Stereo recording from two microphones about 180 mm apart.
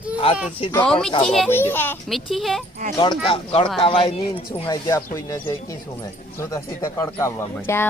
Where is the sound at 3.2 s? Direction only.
30° left (ahead or behind); by 7.8 s 15° left (ahead or behind).